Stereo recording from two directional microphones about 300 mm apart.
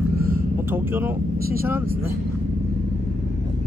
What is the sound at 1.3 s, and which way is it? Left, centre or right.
Speech, right.